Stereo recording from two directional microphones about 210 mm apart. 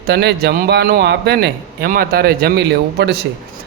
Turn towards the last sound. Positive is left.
turn(degrees=-50)  # may be behind; listen again after turning